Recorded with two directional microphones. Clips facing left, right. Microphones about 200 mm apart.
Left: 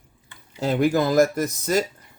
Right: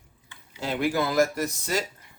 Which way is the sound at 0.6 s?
40° left (ahead or behind).